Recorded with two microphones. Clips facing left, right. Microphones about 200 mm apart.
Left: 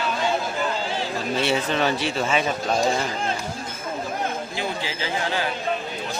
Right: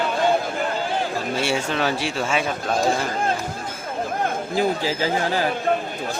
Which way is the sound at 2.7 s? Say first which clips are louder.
Right 4 dB; 55° right (ahead or behind).